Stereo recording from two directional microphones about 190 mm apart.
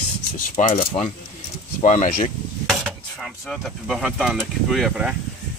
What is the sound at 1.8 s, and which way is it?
Speech, 40° left (ahead or behind).